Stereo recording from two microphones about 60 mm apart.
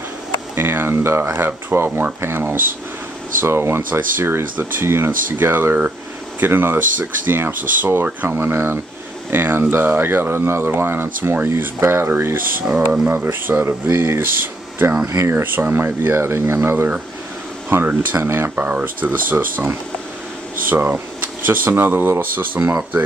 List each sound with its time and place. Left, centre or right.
0.6 s speech: right